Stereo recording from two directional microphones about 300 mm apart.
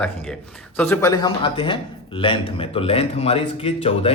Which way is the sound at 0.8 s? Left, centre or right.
Centre.